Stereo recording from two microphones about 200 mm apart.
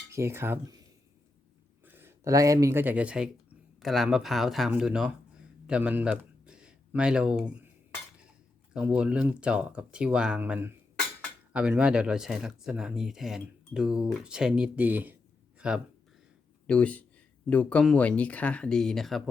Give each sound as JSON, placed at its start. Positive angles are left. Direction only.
{"t": 0.1, "sound": "cutlery", "side_deg": -15}
{"t": 1.8, "sound": "a man's voice", "side_deg": -10}
{"t": 8.7, "sound": "speech", "side_deg": -5}
{"t": 16.6, "sound": "speech", "side_deg": 5}